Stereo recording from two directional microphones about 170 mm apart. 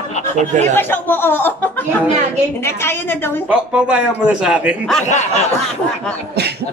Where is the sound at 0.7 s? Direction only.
10° left (ahead or behind).